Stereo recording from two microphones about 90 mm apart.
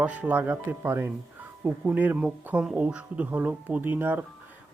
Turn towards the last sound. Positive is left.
turn(degrees=-20)  # may be behind; listen again after turning